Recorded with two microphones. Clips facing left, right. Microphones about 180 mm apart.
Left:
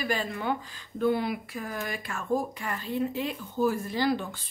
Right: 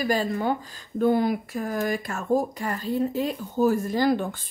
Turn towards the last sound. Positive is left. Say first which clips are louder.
# right 5 dB
turn(degrees=-50)  # may be behind; listen again after turning